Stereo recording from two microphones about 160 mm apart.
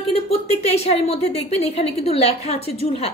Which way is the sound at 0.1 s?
40° left (ahead or behind).